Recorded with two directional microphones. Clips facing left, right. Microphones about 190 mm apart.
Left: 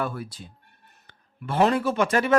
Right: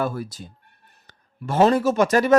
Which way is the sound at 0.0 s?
40° right (ahead or behind).